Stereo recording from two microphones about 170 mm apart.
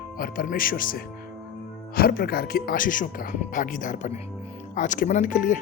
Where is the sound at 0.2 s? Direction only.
55° left (ahead or behind).